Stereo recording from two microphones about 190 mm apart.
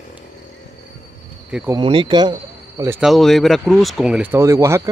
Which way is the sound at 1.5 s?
5° right (ahead or behind).